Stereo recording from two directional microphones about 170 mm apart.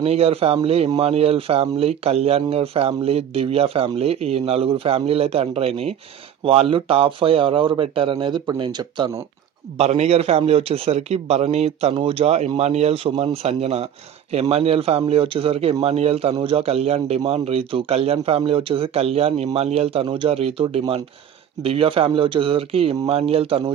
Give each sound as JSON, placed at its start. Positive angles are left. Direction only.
{"t": 0.0, "sound": "speech", "side_deg": -35}
{"t": 9.7, "sound": "speech", "side_deg": -40}